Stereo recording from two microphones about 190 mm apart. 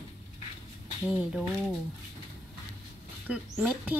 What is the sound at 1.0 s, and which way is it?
Speech, 5° right (ahead or behind).